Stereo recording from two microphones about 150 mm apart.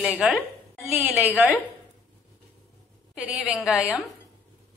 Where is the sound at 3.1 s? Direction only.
5° right (ahead or behind).